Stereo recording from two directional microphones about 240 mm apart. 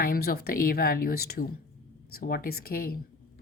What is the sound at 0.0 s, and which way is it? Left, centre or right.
A woman's voice, left.